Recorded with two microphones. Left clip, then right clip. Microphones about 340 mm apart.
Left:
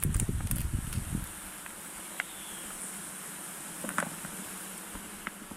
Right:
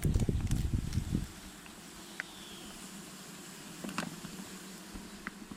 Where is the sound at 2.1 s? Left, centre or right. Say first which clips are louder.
Left 5 dB; centre.